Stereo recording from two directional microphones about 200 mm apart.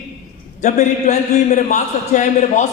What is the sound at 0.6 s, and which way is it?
A man's voice, 35° left (ahead or behind).